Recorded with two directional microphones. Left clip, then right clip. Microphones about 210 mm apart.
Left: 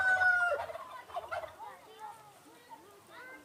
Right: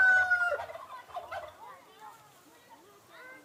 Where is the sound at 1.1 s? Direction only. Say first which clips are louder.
Left 1 dB; 20° left (ahead or behind).